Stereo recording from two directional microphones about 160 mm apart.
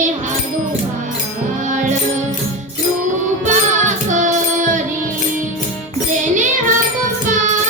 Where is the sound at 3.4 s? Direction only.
50° right (ahead or behind).